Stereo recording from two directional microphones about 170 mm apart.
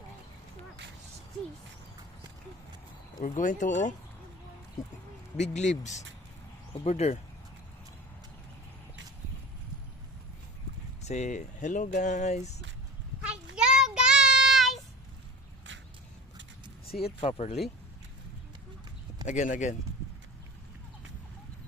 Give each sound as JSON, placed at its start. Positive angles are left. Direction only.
{"t": 3.2, "sound": "speech", "side_deg": 50}
{"t": 5.4, "sound": "speech", "side_deg": 45}
{"t": 11.0, "sound": "speech", "side_deg": 40}
{"t": 13.6, "sound": "child singing", "side_deg": -5}
{"t": 16.8, "sound": "a sound", "side_deg": 65}
{"t": 17.2, "sound": "speech", "side_deg": 35}
{"t": 19.2, "sound": "speech", "side_deg": 45}